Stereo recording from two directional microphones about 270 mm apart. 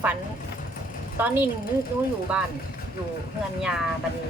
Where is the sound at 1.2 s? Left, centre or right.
Centre.